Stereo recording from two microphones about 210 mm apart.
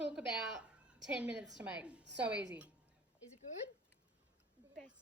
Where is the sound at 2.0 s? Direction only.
55° right (ahead or behind).